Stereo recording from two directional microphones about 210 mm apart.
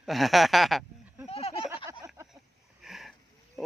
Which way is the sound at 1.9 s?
15° right (ahead or behind).